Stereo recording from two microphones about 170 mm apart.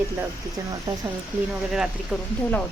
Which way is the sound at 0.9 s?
20° right (ahead or behind).